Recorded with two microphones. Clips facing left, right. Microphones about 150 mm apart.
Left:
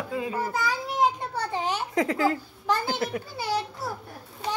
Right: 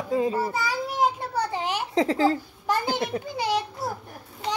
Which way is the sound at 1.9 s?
30° right (ahead or behind).